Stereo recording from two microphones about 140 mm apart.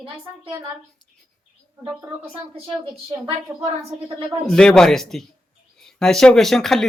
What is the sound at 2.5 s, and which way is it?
Speech, 40° right (ahead or behind).